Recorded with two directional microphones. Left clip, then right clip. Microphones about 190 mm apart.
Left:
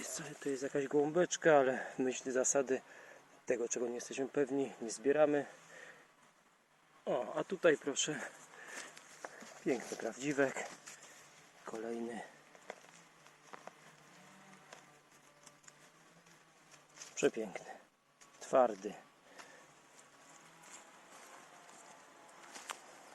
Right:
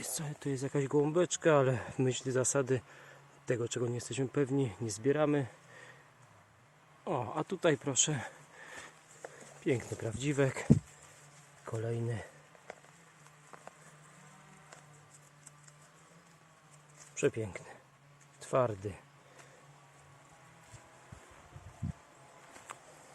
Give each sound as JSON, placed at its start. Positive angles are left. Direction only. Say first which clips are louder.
{"t": 0.0, "sound": "speech", "louder": "right 1 dB", "side_deg": -30}
{"t": 7.0, "sound": "speech", "louder": "right 1 dB", "side_deg": -25}
{"t": 9.6, "sound": "speech", "louder": "right 3 dB", "side_deg": -20}
{"t": 17.2, "sound": "speech", "louder": "right 2 dB", "side_deg": -10}
{"t": 22.7, "sound": "a sound", "louder": "left 2 dB", "side_deg": 50}